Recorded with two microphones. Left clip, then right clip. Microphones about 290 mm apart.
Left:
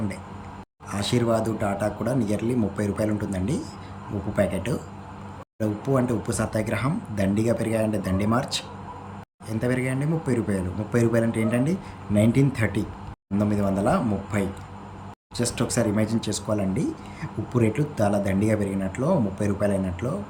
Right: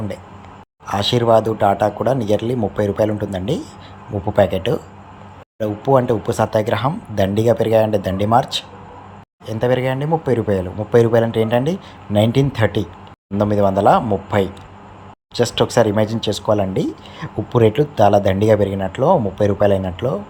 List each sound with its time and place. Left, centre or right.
0.9 s speech: centre
9.5 s speech: centre